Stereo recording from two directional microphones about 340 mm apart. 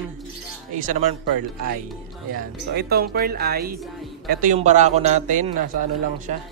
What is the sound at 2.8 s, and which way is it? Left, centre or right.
A man's voice, right.